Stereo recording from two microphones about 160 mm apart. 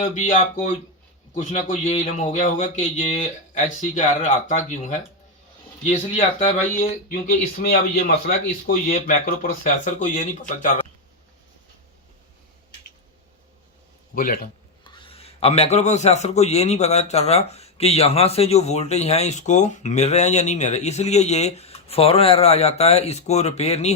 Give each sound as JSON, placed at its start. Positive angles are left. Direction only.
{"t": 0.0, "sound": "speech", "side_deg": 55}
{"t": 6.7, "sound": "speech", "side_deg": 60}
{"t": 14.2, "sound": "speech", "side_deg": 60}
{"t": 14.8, "sound": "a man's voice", "side_deg": 30}